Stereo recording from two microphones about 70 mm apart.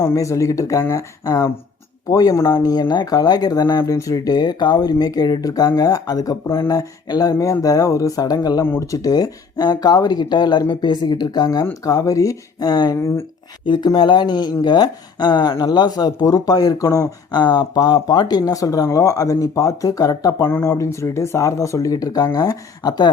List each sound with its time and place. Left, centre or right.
0.0 s speech: left
2.3 s speech: left
2.7 s speech: left
3.9 s speech: left
11.8 s speech: left
13.0 s speech: left
13.7 s speech: left
15.6 s speech: left
17.3 s speech: left
20.4 s speech: left